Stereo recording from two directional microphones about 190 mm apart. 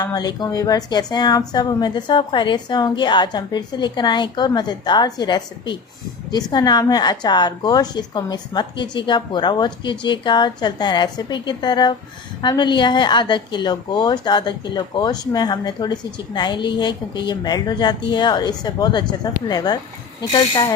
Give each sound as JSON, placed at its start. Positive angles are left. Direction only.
{"t": 0.0, "sound": "a woman's voice", "side_deg": 20}